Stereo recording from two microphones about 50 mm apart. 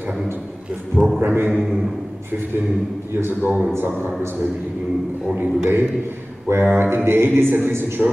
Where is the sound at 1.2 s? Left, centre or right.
Right.